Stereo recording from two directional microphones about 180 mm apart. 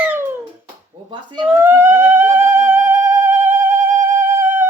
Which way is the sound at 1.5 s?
10° right (ahead or behind).